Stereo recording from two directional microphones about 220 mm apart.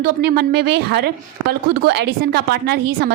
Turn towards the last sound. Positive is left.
turn(degrees=-45)  # may be behind; listen again after turning